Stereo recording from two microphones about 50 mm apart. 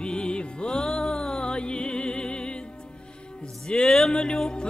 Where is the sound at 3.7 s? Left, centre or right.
Centre.